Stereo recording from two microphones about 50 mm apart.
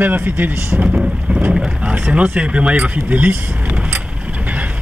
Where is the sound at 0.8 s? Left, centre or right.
Centre.